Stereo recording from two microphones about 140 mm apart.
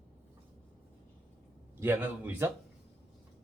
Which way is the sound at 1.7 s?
15° right (ahead or behind).